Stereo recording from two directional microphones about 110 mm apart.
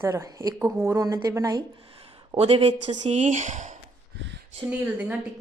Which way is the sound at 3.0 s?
90° right.